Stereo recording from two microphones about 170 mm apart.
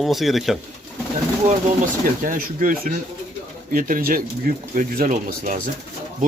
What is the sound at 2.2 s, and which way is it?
Speech, 55° right (ahead or behind).